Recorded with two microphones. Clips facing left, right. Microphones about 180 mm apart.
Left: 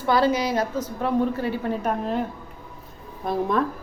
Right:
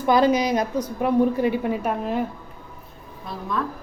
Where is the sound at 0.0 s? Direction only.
15° right (ahead or behind).